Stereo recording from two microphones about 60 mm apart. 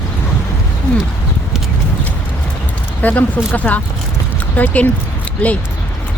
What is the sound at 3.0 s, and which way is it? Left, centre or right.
Speech, left.